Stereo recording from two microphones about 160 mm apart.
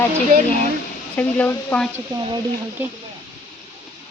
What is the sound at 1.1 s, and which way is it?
Speech, 10° left (ahead or behind).